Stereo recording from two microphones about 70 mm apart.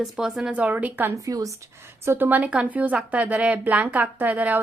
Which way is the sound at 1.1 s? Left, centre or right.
Right.